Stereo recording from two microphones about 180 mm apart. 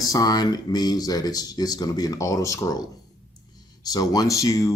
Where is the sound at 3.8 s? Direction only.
20° left (ahead or behind).